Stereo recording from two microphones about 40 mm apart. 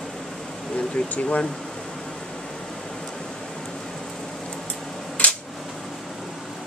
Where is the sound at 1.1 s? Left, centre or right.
Left.